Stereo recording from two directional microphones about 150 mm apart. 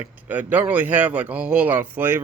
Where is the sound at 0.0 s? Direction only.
10° right (ahead or behind).